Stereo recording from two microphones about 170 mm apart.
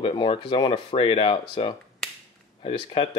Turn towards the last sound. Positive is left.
turn(degrees=35)  # may be behind; listen again after turning